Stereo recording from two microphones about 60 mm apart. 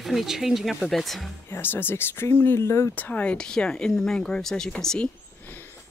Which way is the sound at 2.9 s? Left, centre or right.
Left.